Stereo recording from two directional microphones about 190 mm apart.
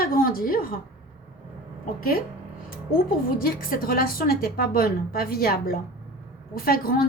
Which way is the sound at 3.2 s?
50° left (ahead or behind).